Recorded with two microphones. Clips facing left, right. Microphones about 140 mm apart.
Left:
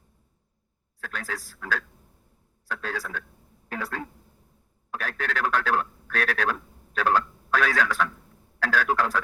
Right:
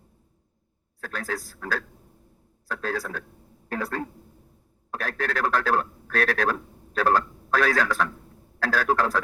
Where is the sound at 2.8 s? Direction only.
40° right (ahead or behind).